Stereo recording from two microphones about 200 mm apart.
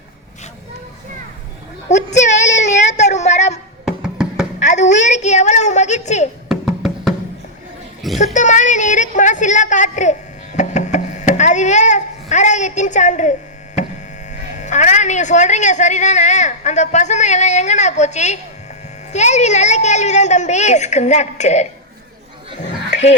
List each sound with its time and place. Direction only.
1.9 s a sound: 35° left (ahead or behind)
3.8 s music: 5° right (ahead or behind)
4.6 s speech: 35° left (ahead or behind)
6.5 s music: centre (ahead or behind)
8.2 s a sound: 35° left (ahead or behind)
14.3 s speech: 35° left (ahead or behind)